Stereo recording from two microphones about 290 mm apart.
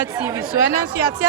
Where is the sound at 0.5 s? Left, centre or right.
Left.